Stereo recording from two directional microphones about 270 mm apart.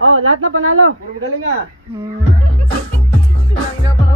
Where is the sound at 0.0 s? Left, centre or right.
Right.